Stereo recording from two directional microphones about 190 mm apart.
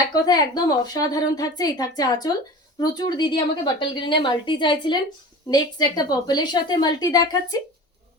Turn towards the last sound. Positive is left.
turn(degrees=20)  # may be behind; listen again after turning